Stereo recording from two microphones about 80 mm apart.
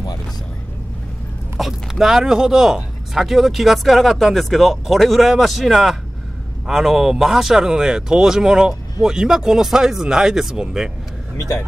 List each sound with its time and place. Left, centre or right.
1.6 s speech: centre
11.3 s speech: left